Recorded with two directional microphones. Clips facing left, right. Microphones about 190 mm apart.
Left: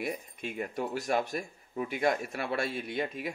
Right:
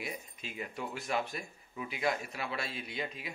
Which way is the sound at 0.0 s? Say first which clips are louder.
Left 7 dB; 55° left (ahead or behind).